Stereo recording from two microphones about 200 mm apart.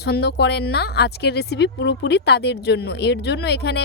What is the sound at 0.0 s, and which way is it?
A woman's voice, 55° left (ahead or behind).